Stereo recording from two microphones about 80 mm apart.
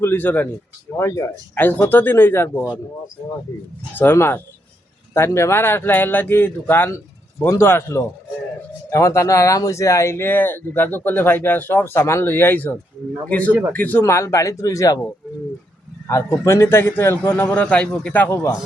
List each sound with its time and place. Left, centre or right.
0.0 s speech: left
0.9 s speech: left
1.9 s speech: left
3.9 s speech: left
11.9 s a man's voice: left
14.0 s speech: left
16.0 s speech: left
17.5 s speech: centre